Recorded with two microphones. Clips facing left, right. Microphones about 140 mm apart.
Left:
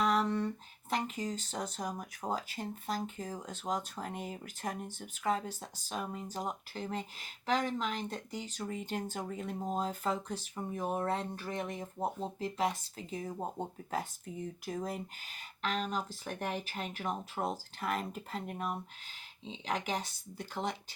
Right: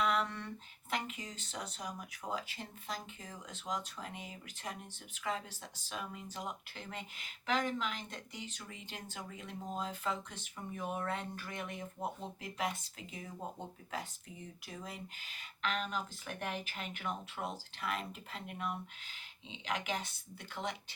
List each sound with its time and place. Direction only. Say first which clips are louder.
0.0 s speech: left 4 dB; 35° left (ahead or behind)